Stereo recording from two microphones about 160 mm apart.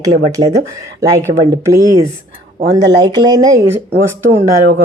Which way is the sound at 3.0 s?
25° right (ahead or behind).